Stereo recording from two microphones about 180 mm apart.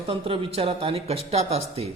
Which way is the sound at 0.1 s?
30° right (ahead or behind).